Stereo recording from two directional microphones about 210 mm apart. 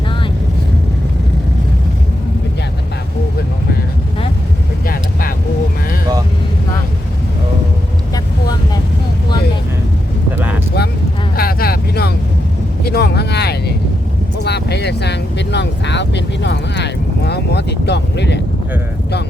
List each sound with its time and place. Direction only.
8.1 s vehicle: 20° left (ahead or behind)
10.8 s vehicle: 50° left (ahead or behind)